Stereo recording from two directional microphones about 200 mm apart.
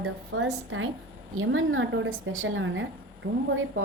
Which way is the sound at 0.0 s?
75° right (ahead or behind).